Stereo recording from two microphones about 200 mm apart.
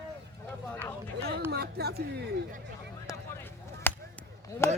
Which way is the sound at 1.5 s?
55° right (ahead or behind).